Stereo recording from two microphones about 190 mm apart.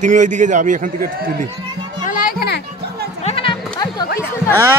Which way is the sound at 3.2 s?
30° left (ahead or behind).